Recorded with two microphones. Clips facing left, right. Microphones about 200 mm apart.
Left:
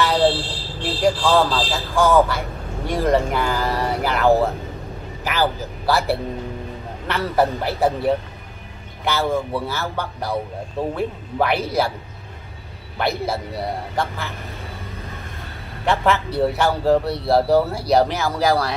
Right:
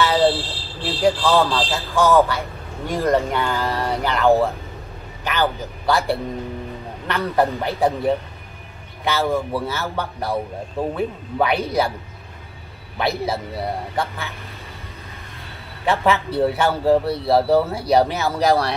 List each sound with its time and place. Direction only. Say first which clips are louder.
0.0 s vehicle: right 1 dB; centre (ahead or behind)
0.8 s a man's voice: even; centre (ahead or behind)
9.0 s a man's voice: even; centre (ahead or behind)
12.9 s a man's voice: even; centre (ahead or behind)
15.8 s a man's voice: even; centre (ahead or behind)